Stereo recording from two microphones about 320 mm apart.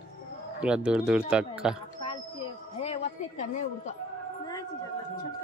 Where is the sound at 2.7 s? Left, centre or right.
Left.